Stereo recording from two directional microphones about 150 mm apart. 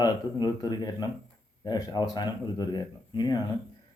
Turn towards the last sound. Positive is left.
turn(degrees=25)  # may be behind; listen again after turning